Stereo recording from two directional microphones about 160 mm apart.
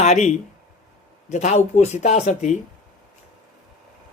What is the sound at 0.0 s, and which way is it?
Speech, 45° left (ahead or behind).